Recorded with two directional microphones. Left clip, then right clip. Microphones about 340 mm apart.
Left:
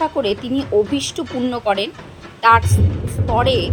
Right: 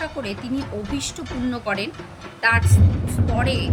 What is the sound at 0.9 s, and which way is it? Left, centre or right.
Speech, centre.